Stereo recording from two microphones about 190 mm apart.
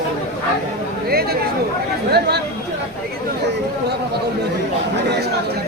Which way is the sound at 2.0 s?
60° right (ahead or behind).